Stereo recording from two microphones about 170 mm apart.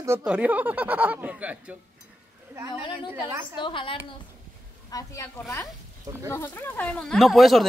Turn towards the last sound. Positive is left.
turn(degrees=0)  # may be behind; listen again after turning